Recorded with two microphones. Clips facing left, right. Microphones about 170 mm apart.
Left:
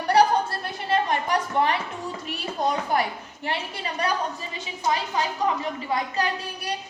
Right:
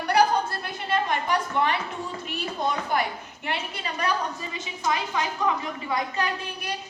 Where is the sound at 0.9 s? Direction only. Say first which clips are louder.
Left 2 dB; 40° left (ahead or behind).